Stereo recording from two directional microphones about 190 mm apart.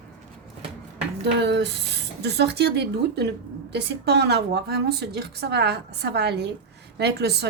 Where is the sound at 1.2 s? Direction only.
60° right (ahead or behind).